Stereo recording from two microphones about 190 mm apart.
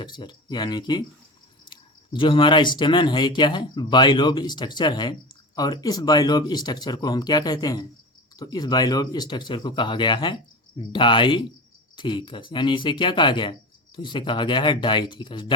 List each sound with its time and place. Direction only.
0.0 s speech: 25° left (ahead or behind)